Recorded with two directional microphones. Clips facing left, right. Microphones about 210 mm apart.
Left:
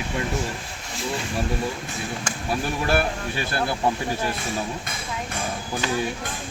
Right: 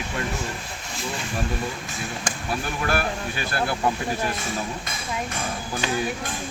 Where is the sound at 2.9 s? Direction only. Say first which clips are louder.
Left 2 dB; 30° left (ahead or behind).